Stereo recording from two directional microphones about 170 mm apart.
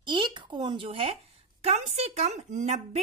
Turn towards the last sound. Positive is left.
turn(degrees=-40)  # may be behind; listen again after turning